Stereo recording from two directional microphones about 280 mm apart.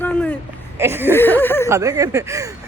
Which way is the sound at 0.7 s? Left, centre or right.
Centre.